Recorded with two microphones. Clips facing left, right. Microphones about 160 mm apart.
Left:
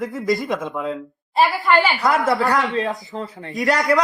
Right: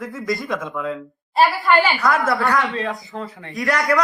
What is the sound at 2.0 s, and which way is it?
A man's voice, 20° left (ahead or behind).